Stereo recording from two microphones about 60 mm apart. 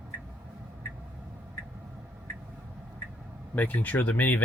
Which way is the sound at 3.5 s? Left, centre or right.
Left.